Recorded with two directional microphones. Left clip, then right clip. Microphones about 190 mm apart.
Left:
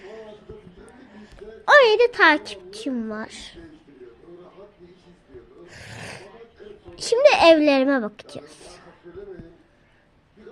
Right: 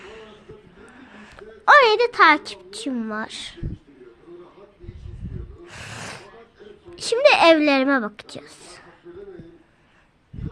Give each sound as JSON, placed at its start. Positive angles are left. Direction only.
{"t": 0.0, "sound": "a sound", "side_deg": -25}
{"t": 1.4, "sound": "a woman's voice", "side_deg": -20}
{"t": 5.6, "sound": "gasp", "side_deg": -20}
{"t": 6.9, "sound": "speech", "side_deg": -15}